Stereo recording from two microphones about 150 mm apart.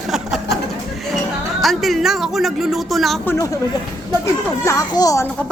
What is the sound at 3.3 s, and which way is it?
Speech, 20° left (ahead or behind).